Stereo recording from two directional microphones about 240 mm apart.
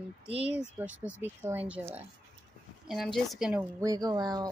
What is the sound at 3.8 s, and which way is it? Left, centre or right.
Speech, centre.